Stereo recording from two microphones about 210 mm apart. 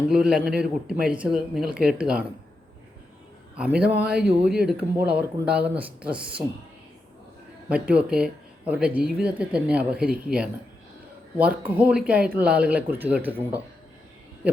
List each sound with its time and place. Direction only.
0.1 s speech: 5° right (ahead or behind)
3.8 s speech: 5° right (ahead or behind)
7.7 s speech: 5° right (ahead or behind)